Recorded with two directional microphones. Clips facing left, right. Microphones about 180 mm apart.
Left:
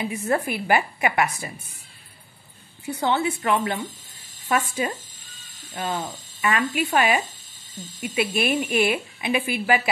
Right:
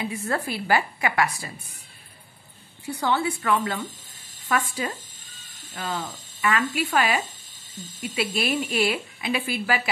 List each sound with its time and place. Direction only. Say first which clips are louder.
0.0 s a woman's voice: left 3 dB; 20° left (ahead or behind)
2.9 s a woman's voice: left 2 dB; 20° left (ahead or behind)